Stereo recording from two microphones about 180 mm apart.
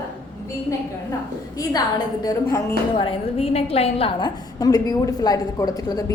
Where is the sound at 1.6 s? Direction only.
20° left (ahead or behind).